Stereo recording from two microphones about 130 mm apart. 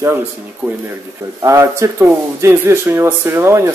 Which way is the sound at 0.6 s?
15° right (ahead or behind).